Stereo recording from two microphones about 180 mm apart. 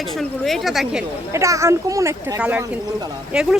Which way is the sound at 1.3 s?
15° right (ahead or behind).